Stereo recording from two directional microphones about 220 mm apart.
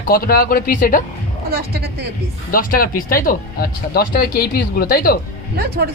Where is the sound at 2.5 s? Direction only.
40° left (ahead or behind).